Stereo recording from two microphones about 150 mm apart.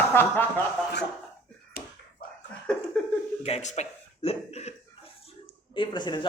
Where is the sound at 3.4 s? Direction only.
45° left (ahead or behind).